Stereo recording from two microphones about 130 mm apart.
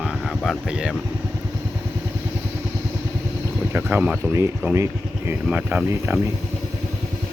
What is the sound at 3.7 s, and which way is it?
Speech, 15° right (ahead or behind).